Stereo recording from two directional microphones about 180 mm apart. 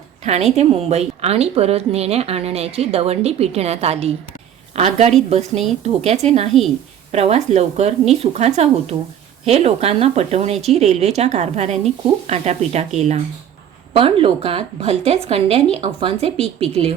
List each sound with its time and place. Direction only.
0.3 s a woman's voice: 35° right (ahead or behind)
13.9 s speech: 30° right (ahead or behind)